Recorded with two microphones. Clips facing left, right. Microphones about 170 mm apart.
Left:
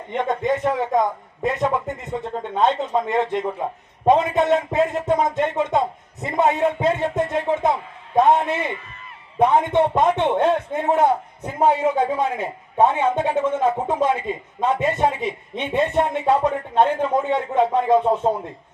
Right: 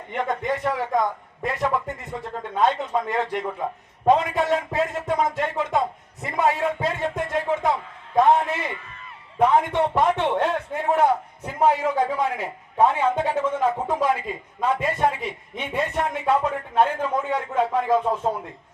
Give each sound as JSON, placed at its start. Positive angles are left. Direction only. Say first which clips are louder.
{"t": 0.1, "sound": "a man's voice", "louder": "left 4 dB", "side_deg": 20}